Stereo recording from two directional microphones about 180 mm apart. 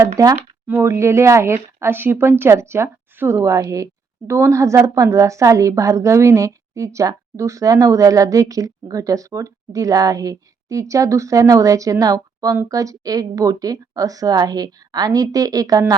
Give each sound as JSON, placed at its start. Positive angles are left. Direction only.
{"t": 0.2, "sound": "a woman's voice", "side_deg": -20}